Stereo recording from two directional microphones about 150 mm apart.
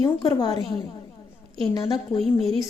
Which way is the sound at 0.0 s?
25° left (ahead or behind).